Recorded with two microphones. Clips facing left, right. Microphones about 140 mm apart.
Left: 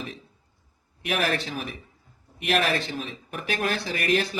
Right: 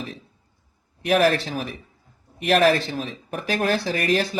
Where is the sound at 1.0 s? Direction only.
35° right (ahead or behind).